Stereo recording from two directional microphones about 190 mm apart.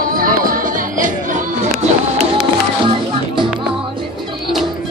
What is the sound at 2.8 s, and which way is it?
Music, 25° right (ahead or behind).